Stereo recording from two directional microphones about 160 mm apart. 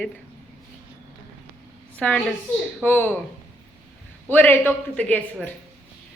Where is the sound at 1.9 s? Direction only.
10° left (ahead or behind).